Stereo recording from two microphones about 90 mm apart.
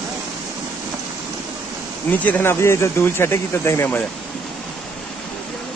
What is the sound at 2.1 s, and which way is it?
Speech, 20° left (ahead or behind).